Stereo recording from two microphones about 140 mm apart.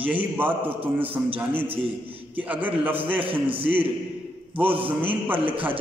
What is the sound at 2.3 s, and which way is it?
Speech, 10° right (ahead or behind).